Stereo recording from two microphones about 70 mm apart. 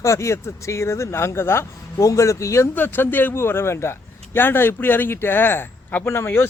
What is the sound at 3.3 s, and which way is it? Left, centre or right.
Speech, left.